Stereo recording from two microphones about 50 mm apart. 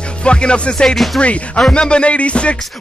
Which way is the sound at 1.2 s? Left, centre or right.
Left.